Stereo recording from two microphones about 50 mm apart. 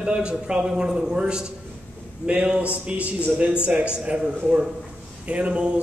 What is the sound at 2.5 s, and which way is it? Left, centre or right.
A man's voice, right.